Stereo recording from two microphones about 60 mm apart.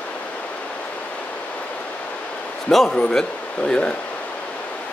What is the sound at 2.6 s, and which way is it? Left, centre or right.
Speech, centre.